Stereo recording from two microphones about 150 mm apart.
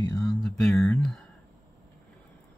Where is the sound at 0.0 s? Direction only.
25° left (ahead or behind).